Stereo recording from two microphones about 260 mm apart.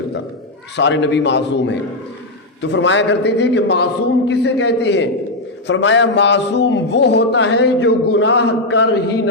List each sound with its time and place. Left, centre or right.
0.8 s music: left
4.3 s a man's voice: left
5.6 s music: left